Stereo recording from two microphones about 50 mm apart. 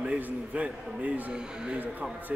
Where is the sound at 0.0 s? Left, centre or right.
Right.